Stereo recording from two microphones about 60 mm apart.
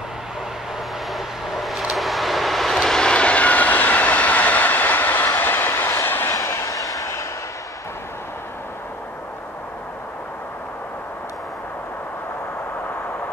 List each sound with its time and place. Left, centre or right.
1.1 s vehicle: centre; by 6.3 s left
6.3 s vehicle: left